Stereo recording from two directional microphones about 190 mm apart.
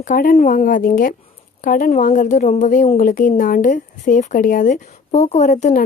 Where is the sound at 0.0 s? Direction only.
45° left (ahead or behind).